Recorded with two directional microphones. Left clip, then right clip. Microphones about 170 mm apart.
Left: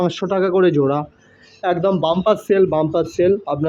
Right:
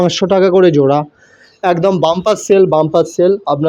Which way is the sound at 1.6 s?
45° right (ahead or behind).